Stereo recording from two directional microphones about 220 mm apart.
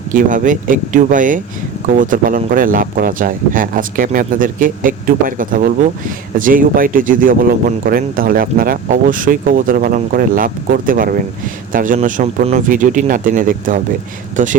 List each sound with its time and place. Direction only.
0.1 s speech: 35° right (ahead or behind)